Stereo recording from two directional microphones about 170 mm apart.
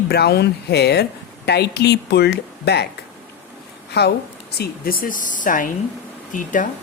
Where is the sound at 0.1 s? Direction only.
70° left (ahead or behind).